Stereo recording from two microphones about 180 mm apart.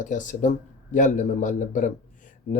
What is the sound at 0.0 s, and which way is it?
Speech, 45° left (ahead or behind).